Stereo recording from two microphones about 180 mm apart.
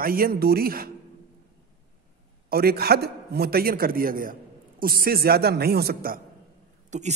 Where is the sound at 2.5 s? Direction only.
60° right (ahead or behind).